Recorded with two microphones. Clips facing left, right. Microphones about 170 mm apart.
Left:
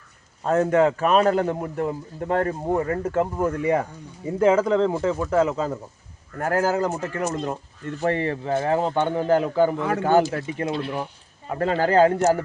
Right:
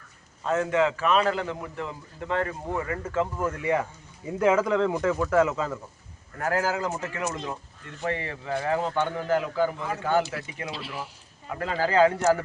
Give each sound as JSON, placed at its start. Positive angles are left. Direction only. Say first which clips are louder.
{"t": 0.4, "sound": "a man's voice", "louder": "left 5 dB", "side_deg": 40}
{"t": 6.4, "sound": "a man's voice", "louder": "left 5 dB", "side_deg": 50}
{"t": 8.5, "sound": "speech", "louder": "left 3 dB", "side_deg": 30}
{"t": 9.7, "sound": "speech", "louder": "left 8 dB", "side_deg": 75}
{"t": 10.0, "sound": "speech", "louder": "left 6 dB", "side_deg": 40}
{"t": 11.8, "sound": "a man's voice", "louder": "left 3 dB", "side_deg": 50}